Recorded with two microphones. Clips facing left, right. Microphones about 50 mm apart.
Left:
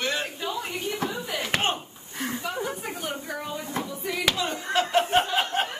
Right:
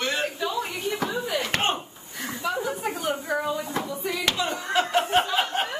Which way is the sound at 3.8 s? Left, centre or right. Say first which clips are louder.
Right 2 dB; right.